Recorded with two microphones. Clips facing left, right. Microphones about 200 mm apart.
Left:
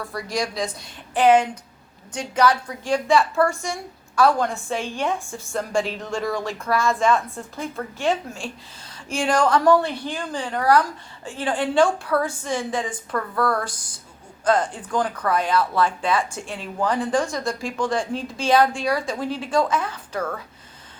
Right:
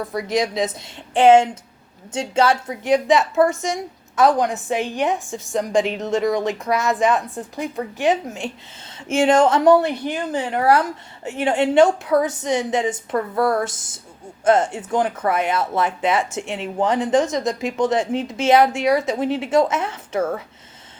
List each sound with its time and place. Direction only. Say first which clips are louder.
0.0 s a woman's voice: right 5 dB; 20° right (ahead or behind)